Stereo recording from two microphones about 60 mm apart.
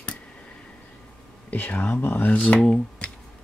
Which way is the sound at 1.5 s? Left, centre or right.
Left.